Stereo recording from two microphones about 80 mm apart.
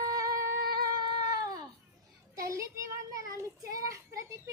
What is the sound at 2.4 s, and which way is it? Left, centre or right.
Child singing, right.